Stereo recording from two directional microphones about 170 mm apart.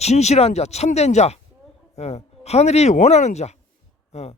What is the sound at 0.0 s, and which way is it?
Speech, 40° left (ahead or behind).